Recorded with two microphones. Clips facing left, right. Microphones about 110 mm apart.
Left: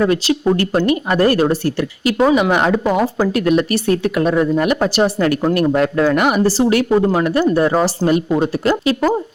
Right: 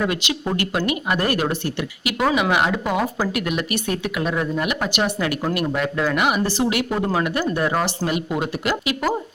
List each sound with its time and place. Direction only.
0.0 s speech: 35° left (ahead or behind)